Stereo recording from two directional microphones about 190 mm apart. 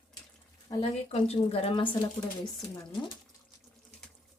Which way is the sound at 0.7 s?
30° left (ahead or behind).